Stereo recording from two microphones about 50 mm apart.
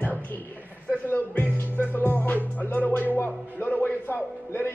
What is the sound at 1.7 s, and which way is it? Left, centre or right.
Music, left.